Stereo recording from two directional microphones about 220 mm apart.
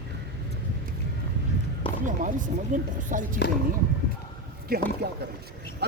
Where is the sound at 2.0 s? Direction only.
35° right (ahead or behind).